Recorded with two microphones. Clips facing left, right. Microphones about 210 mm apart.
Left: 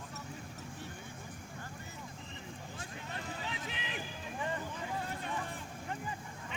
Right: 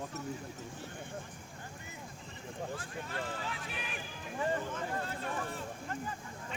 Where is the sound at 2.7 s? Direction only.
20° left (ahead or behind).